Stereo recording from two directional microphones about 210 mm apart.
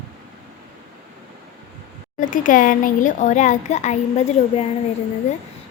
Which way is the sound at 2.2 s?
40° left (ahead or behind).